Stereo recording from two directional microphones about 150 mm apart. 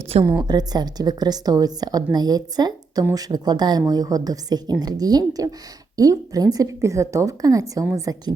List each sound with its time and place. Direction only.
0.3 s a woman's voice: 25° right (ahead or behind)